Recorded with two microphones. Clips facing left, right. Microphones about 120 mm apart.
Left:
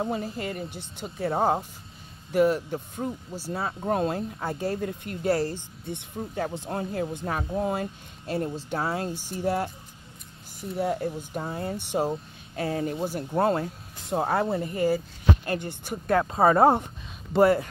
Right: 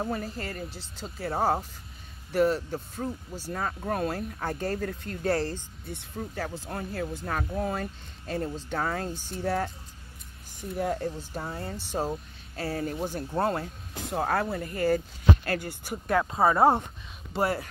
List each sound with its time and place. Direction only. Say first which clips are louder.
0.0 s speech: left 3 dB; 15° left (ahead or behind)
3.8 s speech: left 6 dB; 25° left (ahead or behind)
10.8 s speech: left 2 dB; 15° left (ahead or behind)
13.2 s speech: left 5 dB; 20° left (ahead or behind)